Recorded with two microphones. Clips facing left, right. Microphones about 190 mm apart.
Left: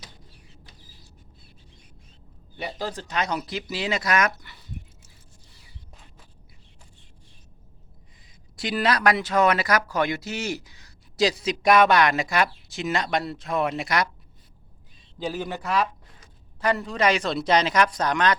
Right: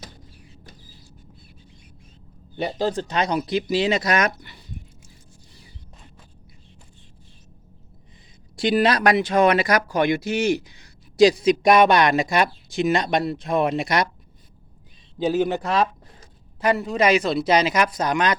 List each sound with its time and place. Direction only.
2.6 s speech: 30° right (ahead or behind)
8.7 s speech: 25° right (ahead or behind)
15.2 s speech: 25° right (ahead or behind)
16.6 s speech: 10° right (ahead or behind)